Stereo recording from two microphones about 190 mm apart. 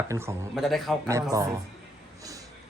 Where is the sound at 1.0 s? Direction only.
15° right (ahead or behind).